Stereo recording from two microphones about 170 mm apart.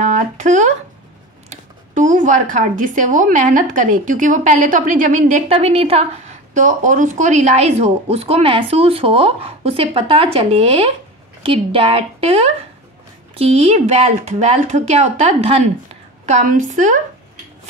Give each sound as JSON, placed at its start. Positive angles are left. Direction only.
{"t": 0.0, "sound": "speech", "side_deg": -45}